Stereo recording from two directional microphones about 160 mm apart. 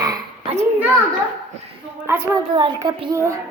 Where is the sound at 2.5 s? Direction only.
30° right (ahead or behind).